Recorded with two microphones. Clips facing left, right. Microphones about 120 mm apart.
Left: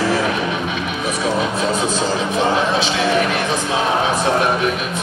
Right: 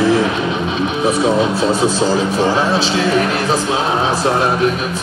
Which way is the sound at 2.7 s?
35° right (ahead or behind).